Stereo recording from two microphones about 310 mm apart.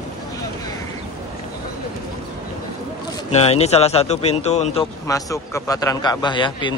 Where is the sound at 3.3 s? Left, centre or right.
Centre.